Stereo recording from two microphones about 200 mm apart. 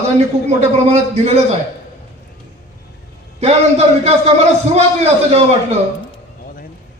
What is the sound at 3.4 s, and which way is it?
A man's voice, 30° right (ahead or behind).